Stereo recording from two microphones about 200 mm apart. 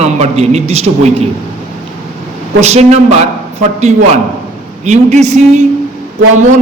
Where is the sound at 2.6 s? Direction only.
35° right (ahead or behind).